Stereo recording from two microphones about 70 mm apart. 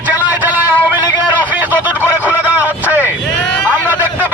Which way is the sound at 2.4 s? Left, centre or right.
Right.